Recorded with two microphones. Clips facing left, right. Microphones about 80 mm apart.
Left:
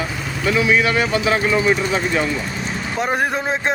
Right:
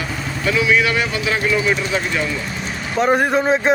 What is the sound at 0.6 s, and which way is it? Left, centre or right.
Speech, left.